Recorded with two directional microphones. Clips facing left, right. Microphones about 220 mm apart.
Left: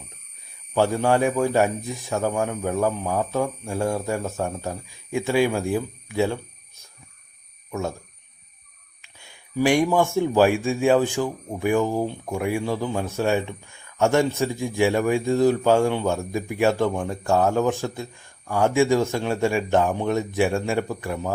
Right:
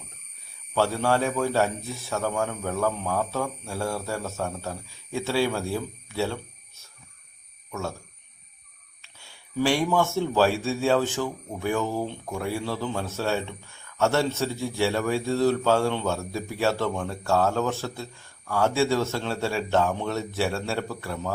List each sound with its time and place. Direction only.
0.7 s speech: 15° left (ahead or behind)
7.7 s speech: 15° left (ahead or behind)
9.0 s speech: 15° left (ahead or behind)